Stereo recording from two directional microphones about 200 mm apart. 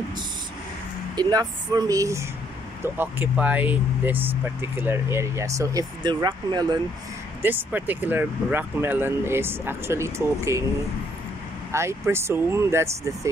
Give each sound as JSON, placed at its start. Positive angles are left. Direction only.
{"t": 1.1, "sound": "speech", "side_deg": -20}
{"t": 7.4, "sound": "speech", "side_deg": -10}
{"t": 11.7, "sound": "speech", "side_deg": -15}